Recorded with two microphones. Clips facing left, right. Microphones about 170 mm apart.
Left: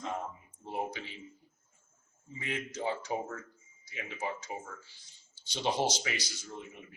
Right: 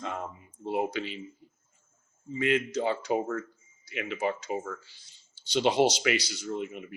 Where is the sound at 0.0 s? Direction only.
85° right.